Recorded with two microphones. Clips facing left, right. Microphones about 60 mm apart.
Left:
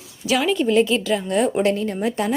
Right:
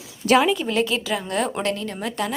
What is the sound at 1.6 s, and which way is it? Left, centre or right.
Speech, left.